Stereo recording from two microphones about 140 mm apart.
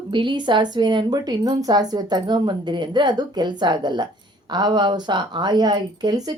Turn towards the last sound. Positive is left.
turn(degrees=-30)  # may be behind; listen again after turning